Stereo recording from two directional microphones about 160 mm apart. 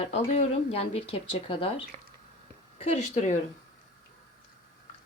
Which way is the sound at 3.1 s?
50° left (ahead or behind).